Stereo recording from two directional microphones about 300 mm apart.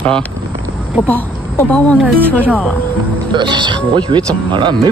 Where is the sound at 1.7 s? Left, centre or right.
Centre.